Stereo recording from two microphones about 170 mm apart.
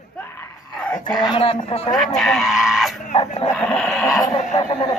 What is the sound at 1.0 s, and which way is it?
Speech, 25° left (ahead or behind).